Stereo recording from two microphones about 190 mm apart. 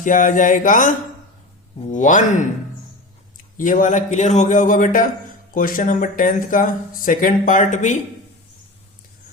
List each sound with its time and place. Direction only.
0.0 s speech: 45° left (ahead or behind)
3.6 s speech: 45° left (ahead or behind)